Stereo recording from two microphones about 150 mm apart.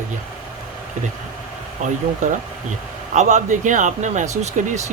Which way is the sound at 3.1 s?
55° right (ahead or behind).